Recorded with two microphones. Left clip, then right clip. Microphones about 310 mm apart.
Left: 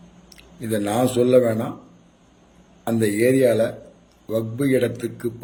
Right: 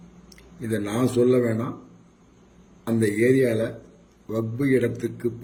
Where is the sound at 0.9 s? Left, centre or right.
Centre.